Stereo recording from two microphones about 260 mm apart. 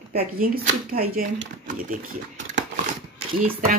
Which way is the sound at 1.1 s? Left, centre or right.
Right.